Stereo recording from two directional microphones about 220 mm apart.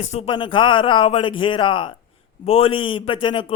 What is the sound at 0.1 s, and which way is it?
A man's voice, 25° left (ahead or behind).